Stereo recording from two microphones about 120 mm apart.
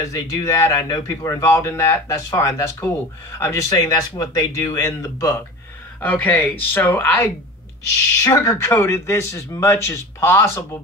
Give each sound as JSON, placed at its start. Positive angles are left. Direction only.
{"t": 0.0, "sound": "speech", "side_deg": 30}
{"t": 5.9, "sound": "speech", "side_deg": 15}
{"t": 8.2, "sound": "speech", "side_deg": 30}